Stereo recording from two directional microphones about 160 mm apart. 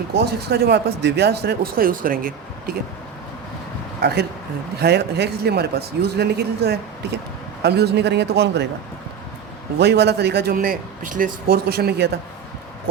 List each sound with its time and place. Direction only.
0.3 s speech: 80° right; by 2.7 s 60° right (ahead or behind)
4.0 s a man's voice: 90° right
9.7 s speech: 90° right